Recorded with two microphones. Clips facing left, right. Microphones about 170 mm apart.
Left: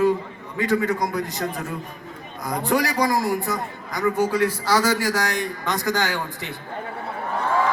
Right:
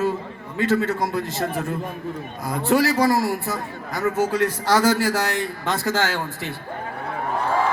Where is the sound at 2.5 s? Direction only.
15° left (ahead or behind).